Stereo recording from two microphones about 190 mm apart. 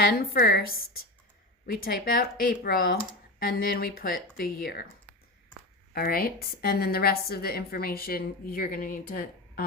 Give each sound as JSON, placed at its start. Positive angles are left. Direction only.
{"t": 0.0, "sound": "a woman's voice", "side_deg": 55}
{"t": 5.9, "sound": "a woman's voice", "side_deg": 50}